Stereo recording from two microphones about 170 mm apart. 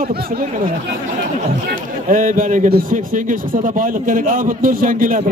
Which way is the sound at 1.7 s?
50° right (ahead or behind).